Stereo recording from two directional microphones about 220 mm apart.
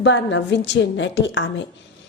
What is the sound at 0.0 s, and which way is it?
A woman's voice, 55° left (ahead or behind).